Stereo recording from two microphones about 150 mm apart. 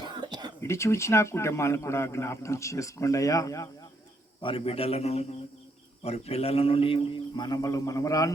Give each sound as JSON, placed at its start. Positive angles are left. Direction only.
{"t": 0.0, "sound": "whispering", "side_deg": -30}
{"t": 0.6, "sound": "speech", "side_deg": 20}
{"t": 4.4, "sound": "a man's voice", "side_deg": 35}